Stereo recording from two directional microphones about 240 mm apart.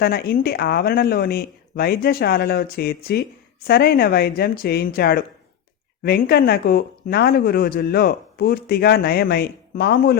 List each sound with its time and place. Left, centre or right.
0.0 s speech: left